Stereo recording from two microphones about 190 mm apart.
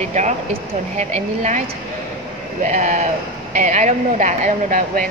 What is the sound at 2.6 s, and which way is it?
Speech, 40° right (ahead or behind).